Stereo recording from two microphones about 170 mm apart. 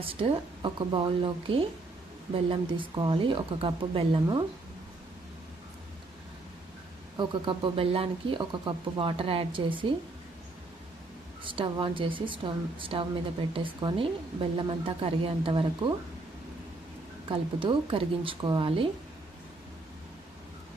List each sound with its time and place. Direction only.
0.0 s speech: 30° right (ahead or behind)
7.2 s speech: 30° right (ahead or behind)
11.4 s speech: 30° right (ahead or behind)
17.2 s speech: 30° right (ahead or behind)